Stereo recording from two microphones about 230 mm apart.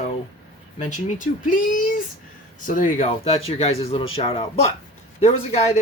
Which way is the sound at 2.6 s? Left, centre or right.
Left.